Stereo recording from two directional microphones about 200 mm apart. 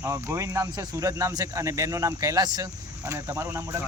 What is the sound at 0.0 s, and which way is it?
Speech, 15° right (ahead or behind).